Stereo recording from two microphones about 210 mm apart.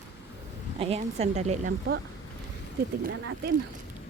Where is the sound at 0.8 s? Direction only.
30° right (ahead or behind).